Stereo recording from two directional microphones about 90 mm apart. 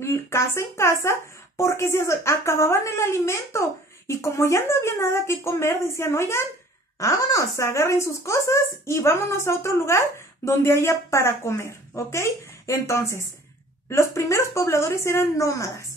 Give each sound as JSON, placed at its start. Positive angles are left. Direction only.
{"t": 0.0, "sound": "speech", "side_deg": 30}